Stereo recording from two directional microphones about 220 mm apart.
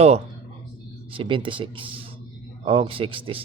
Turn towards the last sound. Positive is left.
turn(degrees=-25)  # may be behind; listen again after turning